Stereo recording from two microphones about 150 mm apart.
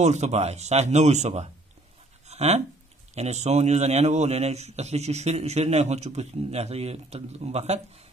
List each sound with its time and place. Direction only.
0.0 s a man's voice: 50° right (ahead or behind)
2.2 s a sound: 45° right (ahead or behind)
3.2 s a man's voice: 50° right (ahead or behind)